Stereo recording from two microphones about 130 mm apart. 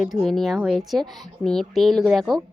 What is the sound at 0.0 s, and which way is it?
A woman's voice, centre (ahead or behind).